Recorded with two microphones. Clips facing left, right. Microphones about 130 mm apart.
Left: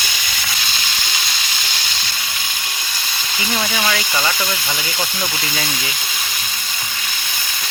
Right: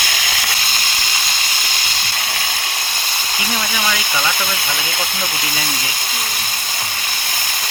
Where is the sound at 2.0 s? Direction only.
60° right (ahead or behind); by 3.4 s 40° right (ahead or behind).